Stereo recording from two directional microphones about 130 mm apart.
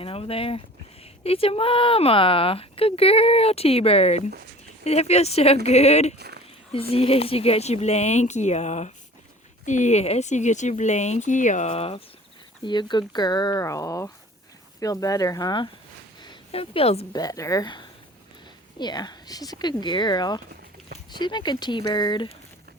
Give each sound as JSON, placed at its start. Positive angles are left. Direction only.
{"t": 0.0, "sound": "speech", "side_deg": 45}
{"t": 12.6, "sound": "speech", "side_deg": 35}
{"t": 17.1, "sound": "speech", "side_deg": 30}